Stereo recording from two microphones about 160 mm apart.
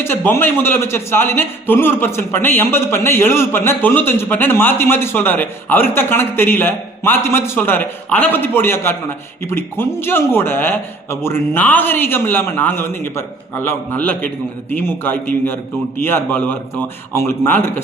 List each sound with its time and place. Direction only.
0.0 s a man's voice: 15° left (ahead or behind)